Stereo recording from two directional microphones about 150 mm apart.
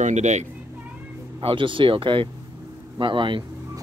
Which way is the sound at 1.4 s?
35° right (ahead or behind).